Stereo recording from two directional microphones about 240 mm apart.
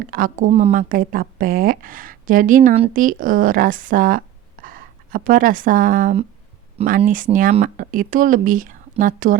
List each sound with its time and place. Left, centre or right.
0.0 s speech: right